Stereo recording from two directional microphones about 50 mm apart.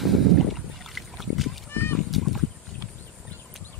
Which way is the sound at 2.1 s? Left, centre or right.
Centre.